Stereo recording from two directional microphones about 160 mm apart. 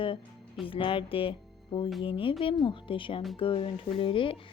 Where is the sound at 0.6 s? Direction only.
35° left (ahead or behind).